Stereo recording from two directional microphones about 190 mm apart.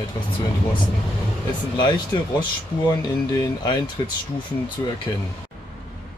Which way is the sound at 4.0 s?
20° left (ahead or behind).